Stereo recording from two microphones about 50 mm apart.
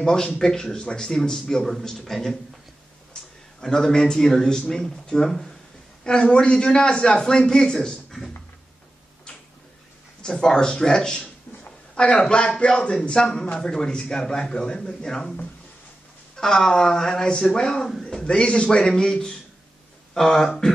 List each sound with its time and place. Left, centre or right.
0.0 s a man's voice: centre
3.1 s a sound: centre
3.6 s a man's voice: centre
10.2 s a man's voice: centre
16.3 s a man's voice: centre